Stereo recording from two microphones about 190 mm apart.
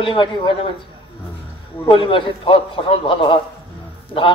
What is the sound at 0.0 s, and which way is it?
Speech, 25° left (ahead or behind).